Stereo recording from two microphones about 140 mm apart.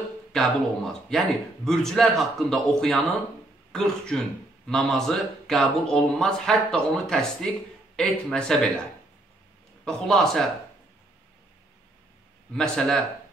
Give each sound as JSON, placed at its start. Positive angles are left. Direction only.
{"t": 0.3, "sound": "speech", "side_deg": 0}
{"t": 9.8, "sound": "speech", "side_deg": 5}
{"t": 12.5, "sound": "speech", "side_deg": 5}